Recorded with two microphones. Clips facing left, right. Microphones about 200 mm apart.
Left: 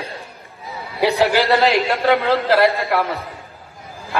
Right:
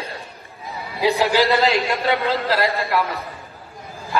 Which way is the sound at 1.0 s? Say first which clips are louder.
Left 1 dB; 65° left (ahead or behind).